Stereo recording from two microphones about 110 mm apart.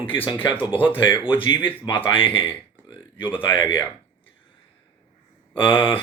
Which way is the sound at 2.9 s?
45° left (ahead or behind).